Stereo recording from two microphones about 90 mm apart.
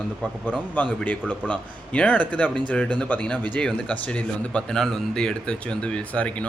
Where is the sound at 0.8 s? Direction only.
15° left (ahead or behind).